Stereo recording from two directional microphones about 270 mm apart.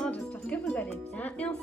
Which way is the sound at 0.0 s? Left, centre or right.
Centre.